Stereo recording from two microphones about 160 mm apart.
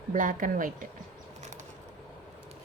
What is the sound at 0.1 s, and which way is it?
Speech, 55° right (ahead or behind).